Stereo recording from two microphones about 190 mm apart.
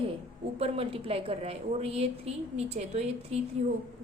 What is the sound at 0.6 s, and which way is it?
A woman's voice, 30° right (ahead or behind).